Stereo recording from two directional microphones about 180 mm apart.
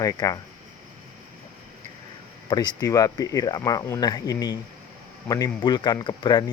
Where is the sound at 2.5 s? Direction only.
25° left (ahead or behind).